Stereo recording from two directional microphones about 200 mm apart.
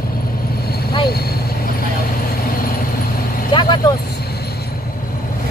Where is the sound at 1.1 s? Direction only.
50° left (ahead or behind).